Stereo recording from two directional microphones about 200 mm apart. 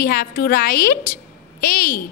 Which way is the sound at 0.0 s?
45° left (ahead or behind).